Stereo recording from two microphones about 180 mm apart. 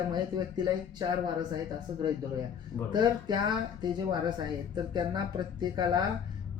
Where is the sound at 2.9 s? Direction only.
25° right (ahead or behind).